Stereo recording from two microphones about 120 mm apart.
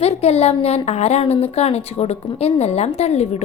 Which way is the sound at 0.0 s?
60° left (ahead or behind).